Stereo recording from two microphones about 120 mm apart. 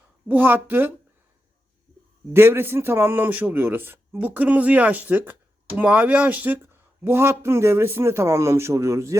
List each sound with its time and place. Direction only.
0.3 s speech: 15° right (ahead or behind)
2.3 s a man's voice: 20° right (ahead or behind)